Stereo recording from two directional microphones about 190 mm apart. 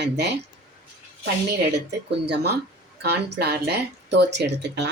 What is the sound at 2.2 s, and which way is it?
Speech, 60° right (ahead or behind).